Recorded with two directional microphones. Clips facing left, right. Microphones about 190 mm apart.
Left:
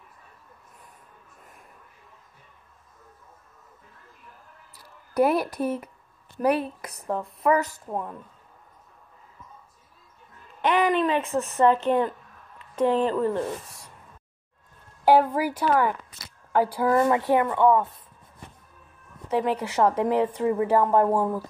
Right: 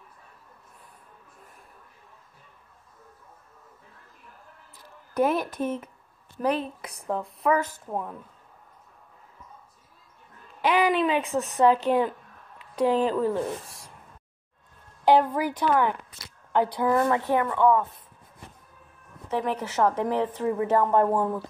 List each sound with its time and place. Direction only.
5.2 s a woman's voice: 10° left (ahead or behind)
10.6 s a woman's voice: 5° right (ahead or behind)
15.0 s a woman's voice: 5° left (ahead or behind)
19.8 s a woman's voice: 10° left (ahead or behind)